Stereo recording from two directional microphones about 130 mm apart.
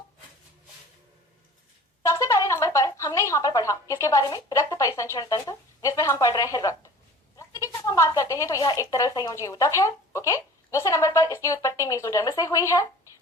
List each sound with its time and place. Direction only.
2.0 s a woman's voice: 25° left (ahead or behind)